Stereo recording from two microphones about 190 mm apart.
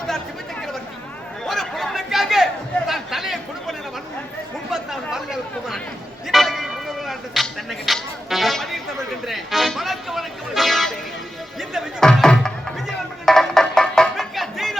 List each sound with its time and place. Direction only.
1.5 s chatter: centre (ahead or behind)
6.2 s a sound: centre (ahead or behind)
9.2 s music: centre (ahead or behind)